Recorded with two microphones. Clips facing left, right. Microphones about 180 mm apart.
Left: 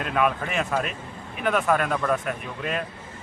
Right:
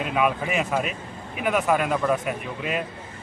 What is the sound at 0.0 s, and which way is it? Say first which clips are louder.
Speech: right 1 dB; 5° right (ahead or behind).